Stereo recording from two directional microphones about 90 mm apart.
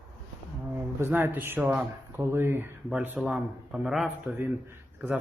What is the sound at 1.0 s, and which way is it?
Speech, 20° right (ahead or behind).